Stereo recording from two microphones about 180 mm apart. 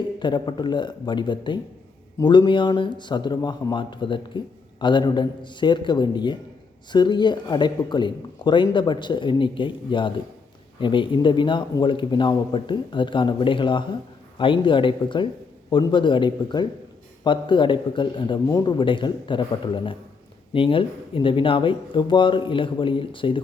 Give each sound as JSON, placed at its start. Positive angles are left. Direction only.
{"t": 0.2, "sound": "a man's voice", "side_deg": 25}